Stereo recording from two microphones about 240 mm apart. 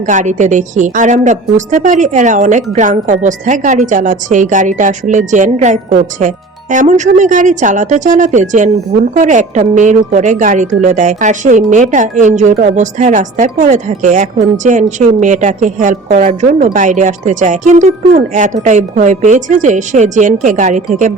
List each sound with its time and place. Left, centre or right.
0.0 s a woman's voice: right